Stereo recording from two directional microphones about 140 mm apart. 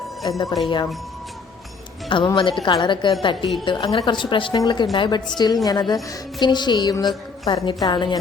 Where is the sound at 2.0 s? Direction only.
35° left (ahead or behind).